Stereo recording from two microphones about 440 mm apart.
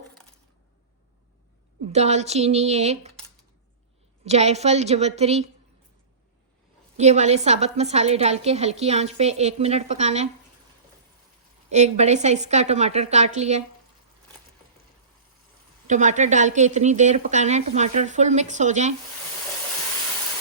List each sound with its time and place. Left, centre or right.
1.8 s a woman's voice: centre
4.2 s a woman's voice: centre
6.9 s a woman's voice: centre
11.7 s a woman's voice: centre
15.9 s a woman's voice: centre